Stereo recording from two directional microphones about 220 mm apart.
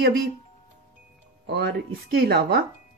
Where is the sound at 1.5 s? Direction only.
45° right (ahead or behind).